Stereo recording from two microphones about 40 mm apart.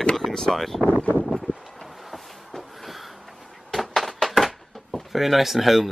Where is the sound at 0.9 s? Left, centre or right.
Left.